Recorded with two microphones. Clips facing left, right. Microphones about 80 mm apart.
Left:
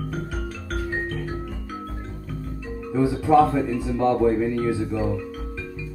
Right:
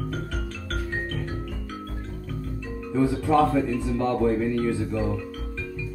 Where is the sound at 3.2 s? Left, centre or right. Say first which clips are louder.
Left 5 dB; centre.